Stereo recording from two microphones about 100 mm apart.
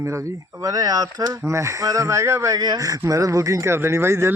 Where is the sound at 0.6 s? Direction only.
40° right (ahead or behind).